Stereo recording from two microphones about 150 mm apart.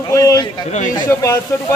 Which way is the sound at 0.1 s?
20° left (ahead or behind).